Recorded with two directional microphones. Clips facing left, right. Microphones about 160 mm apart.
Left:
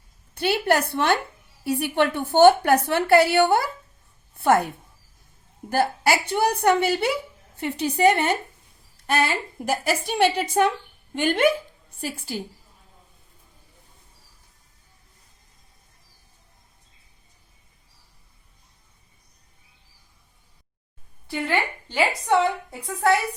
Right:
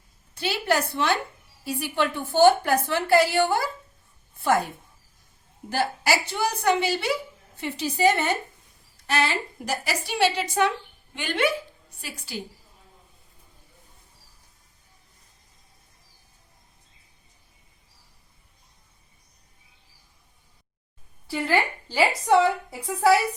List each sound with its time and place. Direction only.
0.3 s a woman's voice: 60° left (ahead or behind)
5.7 s a woman's voice: 55° left (ahead or behind)
21.2 s a woman's voice: 5° right (ahead or behind)